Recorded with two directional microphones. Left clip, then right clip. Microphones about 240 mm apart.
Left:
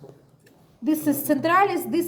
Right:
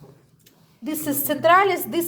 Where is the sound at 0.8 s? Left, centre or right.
Right.